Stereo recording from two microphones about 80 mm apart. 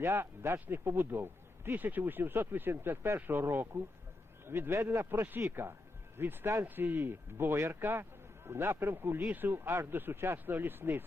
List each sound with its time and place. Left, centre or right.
0.0 s speech: right